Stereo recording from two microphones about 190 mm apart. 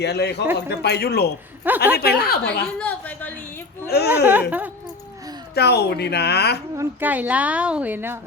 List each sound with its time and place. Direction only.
0.0 s speech: 60° left (ahead or behind)
1.7 s a woman's voice: 10° right (ahead or behind)
2.0 s speech: 55° left (ahead or behind)
2.7 s a sound: 10° left (ahead or behind)
3.8 s speech: 60° left (ahead or behind)
4.1 s a woman's voice: 10° right (ahead or behind)
5.5 s speech: 60° left (ahead or behind)
6.7 s a woman's voice: 10° right (ahead or behind)